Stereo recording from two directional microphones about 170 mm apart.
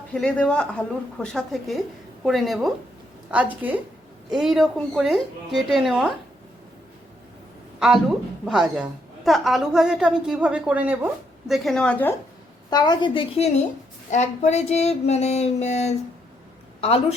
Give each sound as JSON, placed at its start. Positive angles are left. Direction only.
{"t": 0.1, "sound": "a woman's voice", "side_deg": 5}
{"t": 7.8, "sound": "a woman's voice", "side_deg": -5}
{"t": 12.7, "sound": "a woman's voice", "side_deg": 25}
{"t": 14.1, "sound": "a sound", "side_deg": 40}